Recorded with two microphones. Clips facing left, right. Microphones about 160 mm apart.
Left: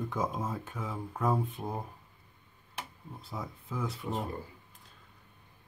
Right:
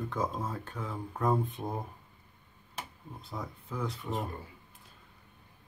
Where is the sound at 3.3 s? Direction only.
5° left (ahead or behind).